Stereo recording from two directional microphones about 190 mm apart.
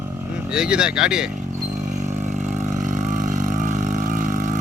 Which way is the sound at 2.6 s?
40° right (ahead or behind).